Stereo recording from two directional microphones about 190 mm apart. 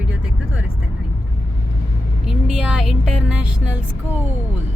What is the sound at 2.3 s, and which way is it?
Speech, 5° right (ahead or behind).